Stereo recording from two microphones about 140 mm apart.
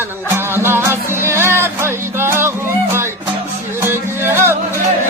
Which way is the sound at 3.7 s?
15° right (ahead or behind).